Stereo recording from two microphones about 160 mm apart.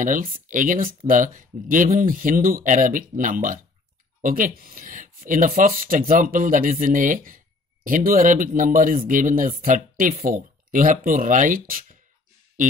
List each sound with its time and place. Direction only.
0.0 s speech: 55° right (ahead or behind)